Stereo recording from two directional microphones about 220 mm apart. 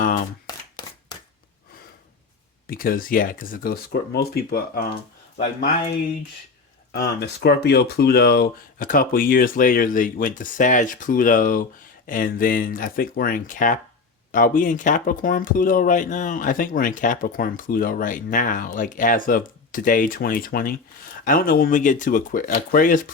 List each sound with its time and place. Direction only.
0.4 s a sound: 20° left (ahead or behind)
2.6 s speech: 40° left (ahead or behind)
6.9 s speech: 45° left (ahead or behind)